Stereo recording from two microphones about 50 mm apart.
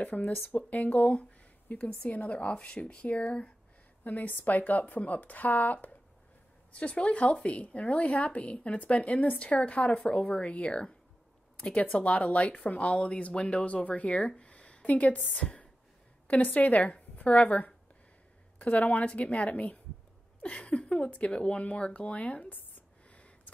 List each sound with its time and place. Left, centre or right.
0.0 s a woman's voice: left
4.0 s speech: left
6.7 s a woman's voice: left
23.0 s a sound: left